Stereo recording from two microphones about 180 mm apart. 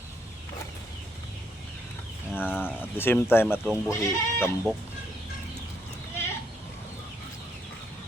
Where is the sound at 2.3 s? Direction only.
10° left (ahead or behind).